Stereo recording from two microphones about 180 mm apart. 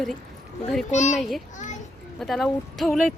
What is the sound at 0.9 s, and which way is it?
Speech, 40° left (ahead or behind).